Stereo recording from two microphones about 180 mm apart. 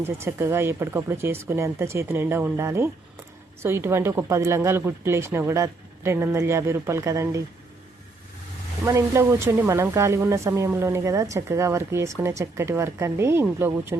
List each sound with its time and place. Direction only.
0.0 s speech: 15° right (ahead or behind)
8.8 s speech: 15° right (ahead or behind)